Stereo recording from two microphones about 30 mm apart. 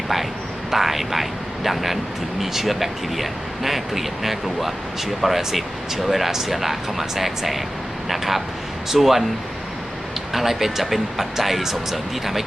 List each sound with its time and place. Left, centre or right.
0.7 s speech: centre
10.3 s speech: centre